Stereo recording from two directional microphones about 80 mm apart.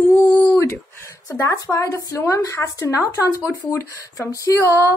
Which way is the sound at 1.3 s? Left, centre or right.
Left.